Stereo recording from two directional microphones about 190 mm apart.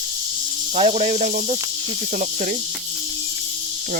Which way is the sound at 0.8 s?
35° right (ahead or behind).